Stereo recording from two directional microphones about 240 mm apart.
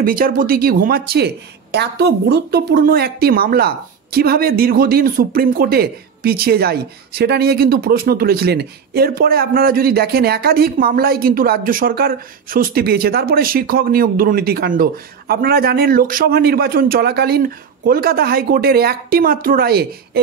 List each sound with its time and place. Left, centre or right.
0.0 s speech: right